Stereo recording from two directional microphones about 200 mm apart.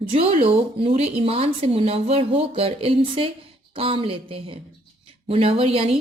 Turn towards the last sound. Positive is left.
turn(degrees=-30)  # may be behind; listen again after turning